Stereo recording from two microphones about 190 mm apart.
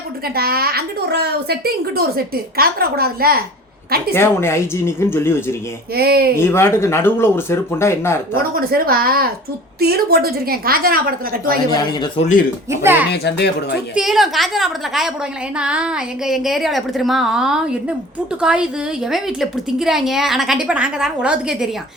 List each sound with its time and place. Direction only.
0.3 s a child's voice: 55° right (ahead or behind)
4.1 s speech: 15° left (ahead or behind)
5.9 s speech: 55° right (ahead or behind)
6.3 s speech: 15° left (ahead or behind)
8.5 s a child's voice: 50° right (ahead or behind)
11.7 s a man's voice: 20° left (ahead or behind)
12.2 s speech: 40° left (ahead or behind)
12.7 s speech: 10° right (ahead or behind)
13.1 s a child's voice: 60° left (ahead or behind)
13.9 s a woman's voice: centre (ahead or behind)